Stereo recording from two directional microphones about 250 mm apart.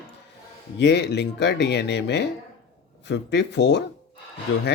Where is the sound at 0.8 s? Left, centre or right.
Left.